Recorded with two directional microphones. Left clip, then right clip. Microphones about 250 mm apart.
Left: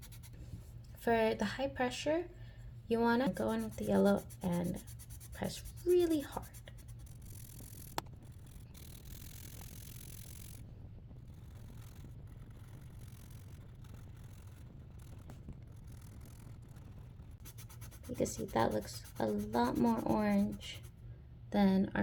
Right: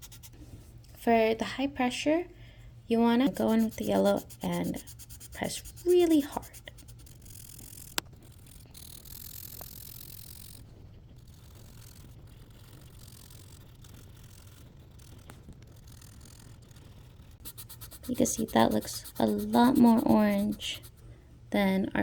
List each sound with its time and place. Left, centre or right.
1.1 s speech: right
18.2 s speech: right